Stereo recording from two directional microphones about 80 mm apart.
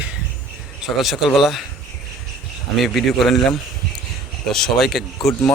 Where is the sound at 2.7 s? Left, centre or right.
Centre.